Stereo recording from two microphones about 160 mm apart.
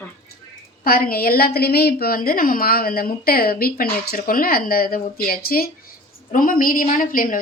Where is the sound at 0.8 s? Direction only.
65° left (ahead or behind).